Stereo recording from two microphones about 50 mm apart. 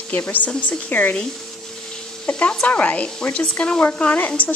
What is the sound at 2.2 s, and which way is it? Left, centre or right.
Speech, left.